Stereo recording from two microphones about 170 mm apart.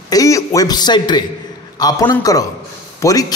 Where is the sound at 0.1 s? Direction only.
20° left (ahead or behind).